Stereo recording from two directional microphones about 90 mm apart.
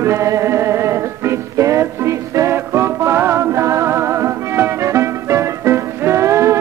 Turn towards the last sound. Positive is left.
turn(degrees=-35)  # may be behind; listen again after turning